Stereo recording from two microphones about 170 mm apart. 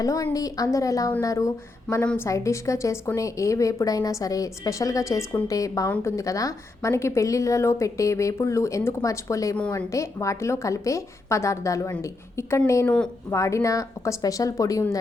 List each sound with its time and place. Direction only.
0.0 s a woman's voice: 20° left (ahead or behind)